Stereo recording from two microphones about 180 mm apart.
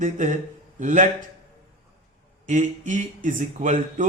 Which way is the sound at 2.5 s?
45° right (ahead or behind).